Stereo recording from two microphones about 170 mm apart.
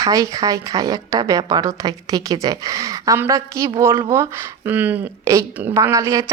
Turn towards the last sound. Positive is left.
turn(degrees=-15)  # may be behind; listen again after turning